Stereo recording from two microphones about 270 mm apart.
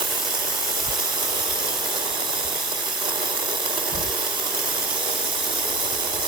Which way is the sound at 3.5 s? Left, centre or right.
Centre.